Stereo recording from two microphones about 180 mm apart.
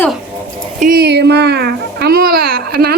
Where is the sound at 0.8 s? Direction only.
55° right (ahead or behind).